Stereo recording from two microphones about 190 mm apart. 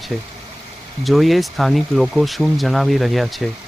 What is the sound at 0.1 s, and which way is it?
Speech, centre (ahead or behind).